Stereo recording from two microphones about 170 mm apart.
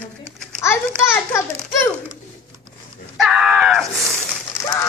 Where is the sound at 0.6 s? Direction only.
15° left (ahead or behind).